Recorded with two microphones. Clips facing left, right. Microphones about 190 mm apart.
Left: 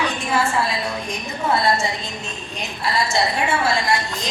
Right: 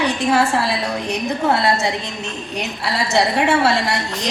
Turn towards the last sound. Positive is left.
turn(degrees=-65)  # may be behind; listen again after turning